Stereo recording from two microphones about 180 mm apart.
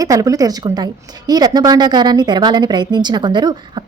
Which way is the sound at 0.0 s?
20° right (ahead or behind).